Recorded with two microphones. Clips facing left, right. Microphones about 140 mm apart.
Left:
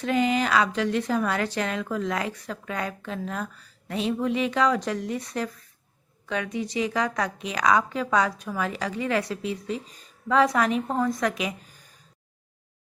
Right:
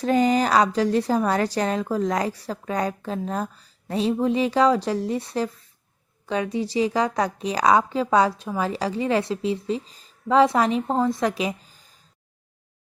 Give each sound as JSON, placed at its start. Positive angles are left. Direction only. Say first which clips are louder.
{"t": 0.0, "sound": "a woman's voice", "louder": "right 4 dB", "side_deg": -40}